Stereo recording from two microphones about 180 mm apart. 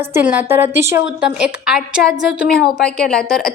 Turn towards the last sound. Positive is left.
turn(degrees=5)  # may be behind; listen again after turning